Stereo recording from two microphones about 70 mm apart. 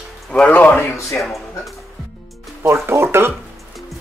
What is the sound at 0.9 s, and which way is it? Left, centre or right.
Speech, left.